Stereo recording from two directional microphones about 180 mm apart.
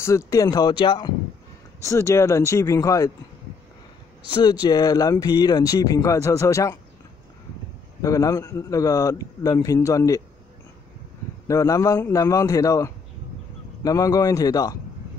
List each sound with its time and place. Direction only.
0.0 s a man's voice: 15° left (ahead or behind)
1.9 s speech: 15° left (ahead or behind)
4.3 s a man's voice: 25° left (ahead or behind)
8.0 s a man's voice: 20° left (ahead or behind)
11.4 s a man's voice: 20° left (ahead or behind)